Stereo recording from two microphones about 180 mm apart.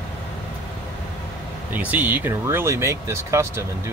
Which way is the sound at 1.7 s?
10° right (ahead or behind).